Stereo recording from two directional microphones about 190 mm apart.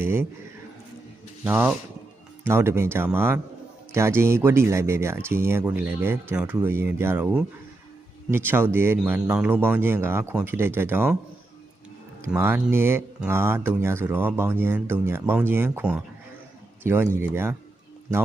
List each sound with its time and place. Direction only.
0.0 s speech: 10° right (ahead or behind)
1.5 s speech: 10° right (ahead or behind)
12.2 s speech: 10° right (ahead or behind)